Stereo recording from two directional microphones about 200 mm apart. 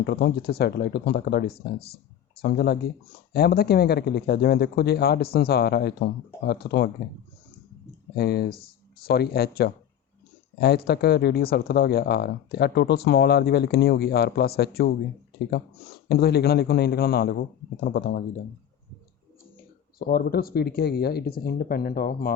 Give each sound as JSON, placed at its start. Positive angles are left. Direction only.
{"t": 0.0, "sound": "speech", "side_deg": 50}
{"t": 8.1, "sound": "speech", "side_deg": 50}
{"t": 16.0, "sound": "speech", "side_deg": 50}
{"t": 20.0, "sound": "speech", "side_deg": 45}